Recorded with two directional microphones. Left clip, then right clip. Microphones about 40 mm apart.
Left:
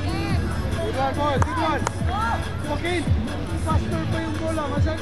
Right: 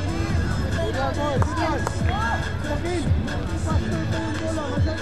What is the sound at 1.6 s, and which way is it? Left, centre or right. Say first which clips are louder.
Run: left 1 dB; centre.